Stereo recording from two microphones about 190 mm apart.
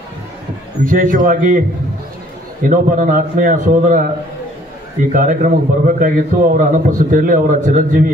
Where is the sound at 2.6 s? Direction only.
45° right (ahead or behind).